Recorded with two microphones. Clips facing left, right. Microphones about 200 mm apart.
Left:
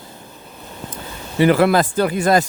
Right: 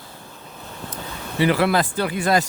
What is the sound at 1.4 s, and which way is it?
Speech, 50° left (ahead or behind).